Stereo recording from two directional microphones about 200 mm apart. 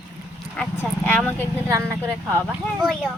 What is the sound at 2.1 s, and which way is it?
Speech, 10° right (ahead or behind).